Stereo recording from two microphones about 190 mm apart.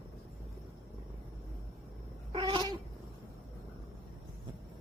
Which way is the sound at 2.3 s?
25° right (ahead or behind).